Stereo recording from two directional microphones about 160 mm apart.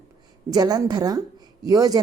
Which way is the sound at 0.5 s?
25° right (ahead or behind).